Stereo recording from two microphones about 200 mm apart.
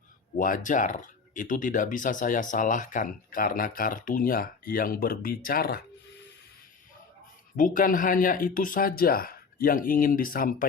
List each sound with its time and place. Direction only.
0.3 s speech: 40° left (ahead or behind)
7.5 s speech: 40° left (ahead or behind)